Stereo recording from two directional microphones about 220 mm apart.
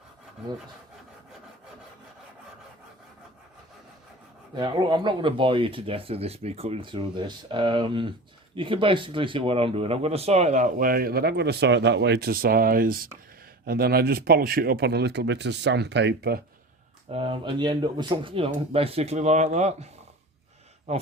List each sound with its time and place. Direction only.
4.5 s speech: 20° right (ahead or behind); by 16.4 s 50° right (ahead or behind)
17.1 s speech: 25° right (ahead or behind)